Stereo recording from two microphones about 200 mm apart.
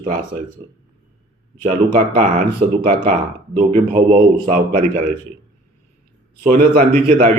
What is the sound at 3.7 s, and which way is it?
Speech, 25° right (ahead or behind).